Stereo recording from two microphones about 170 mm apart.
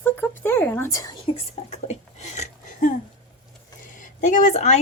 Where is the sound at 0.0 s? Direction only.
15° left (ahead or behind).